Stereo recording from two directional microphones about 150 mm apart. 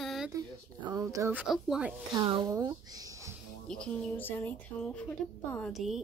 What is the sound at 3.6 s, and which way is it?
Speech, 5° left (ahead or behind).